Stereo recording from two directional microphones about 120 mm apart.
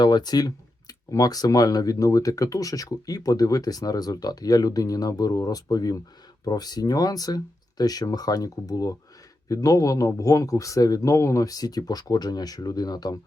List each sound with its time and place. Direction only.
0.0 s a man's voice: 35° left (ahead or behind)